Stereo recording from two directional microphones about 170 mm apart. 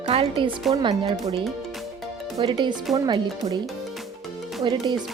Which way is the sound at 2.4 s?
30° right (ahead or behind).